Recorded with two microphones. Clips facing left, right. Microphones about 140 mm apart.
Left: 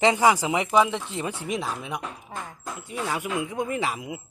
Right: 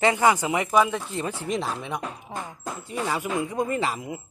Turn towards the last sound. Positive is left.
turn(degrees=5)  # may be behind; listen again after turning